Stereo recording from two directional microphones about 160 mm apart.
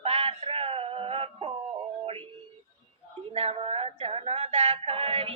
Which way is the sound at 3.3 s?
40° right (ahead or behind).